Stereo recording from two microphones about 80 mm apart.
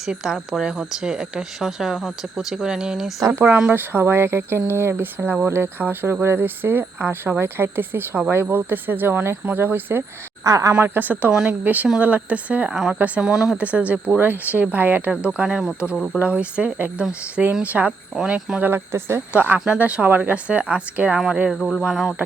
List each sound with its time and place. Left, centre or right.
0.0 s speech: centre
3.2 s speech: right
10.4 s a woman's voice: right
10.8 s speech: right
11.3 s speech: centre
11.6 s speech: right
13.3 s speech: centre
13.6 s speech: centre
18.6 s speech: right
19.5 s speech: centre
21.5 s speech: centre